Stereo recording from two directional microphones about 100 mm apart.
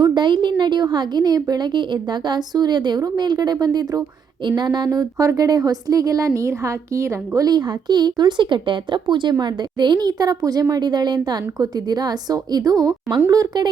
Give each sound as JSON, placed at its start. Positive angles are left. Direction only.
{"t": 0.0, "sound": "a woman's voice", "side_deg": -50}